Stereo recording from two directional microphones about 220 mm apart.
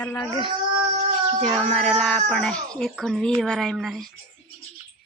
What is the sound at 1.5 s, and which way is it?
Speech, centre (ahead or behind).